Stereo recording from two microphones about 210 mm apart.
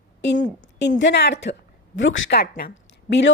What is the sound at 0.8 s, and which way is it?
A woman's voice, 55° left (ahead or behind).